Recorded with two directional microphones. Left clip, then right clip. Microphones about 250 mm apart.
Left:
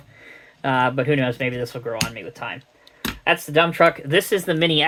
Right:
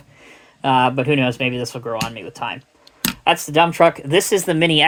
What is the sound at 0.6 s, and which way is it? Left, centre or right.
Speech, right.